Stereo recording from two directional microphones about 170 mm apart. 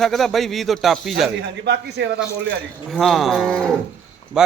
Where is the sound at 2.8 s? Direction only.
Centre (ahead or behind).